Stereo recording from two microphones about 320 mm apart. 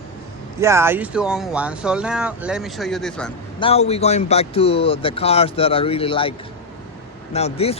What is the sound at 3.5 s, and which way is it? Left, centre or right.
Speech, centre.